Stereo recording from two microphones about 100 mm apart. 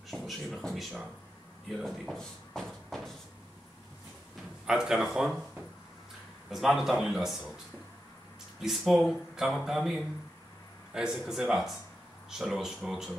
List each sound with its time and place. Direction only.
0.1 s speech: centre (ahead or behind)
4.6 s speech: 5° right (ahead or behind)
6.5 s speech: 5° right (ahead or behind)